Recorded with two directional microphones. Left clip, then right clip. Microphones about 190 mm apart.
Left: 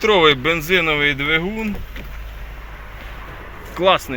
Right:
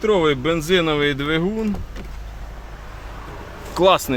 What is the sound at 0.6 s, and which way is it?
Speech, 25° right (ahead or behind).